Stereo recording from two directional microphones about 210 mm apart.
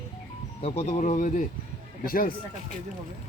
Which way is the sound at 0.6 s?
30° left (ahead or behind).